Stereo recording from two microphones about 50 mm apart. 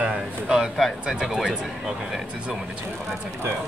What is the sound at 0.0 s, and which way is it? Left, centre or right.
Speech, centre.